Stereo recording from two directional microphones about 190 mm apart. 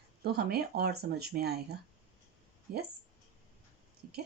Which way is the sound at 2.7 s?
55° right (ahead or behind).